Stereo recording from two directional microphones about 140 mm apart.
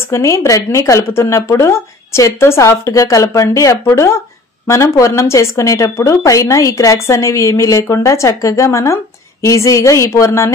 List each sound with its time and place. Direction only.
0.1 s a woman's voice: 20° left (ahead or behind)